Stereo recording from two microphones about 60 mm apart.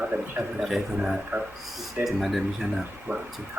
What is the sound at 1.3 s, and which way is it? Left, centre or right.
Speech, right.